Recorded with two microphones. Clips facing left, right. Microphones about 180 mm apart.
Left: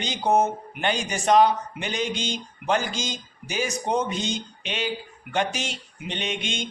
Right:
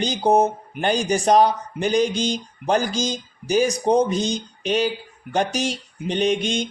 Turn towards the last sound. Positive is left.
turn(degrees=-35)  # may be behind; listen again after turning